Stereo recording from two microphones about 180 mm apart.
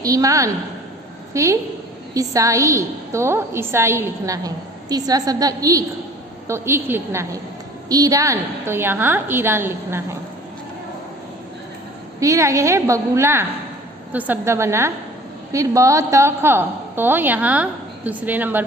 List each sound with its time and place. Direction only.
0.0 s a woman's voice: 20° right (ahead or behind)
12.2 s a woman's voice: 15° right (ahead or behind)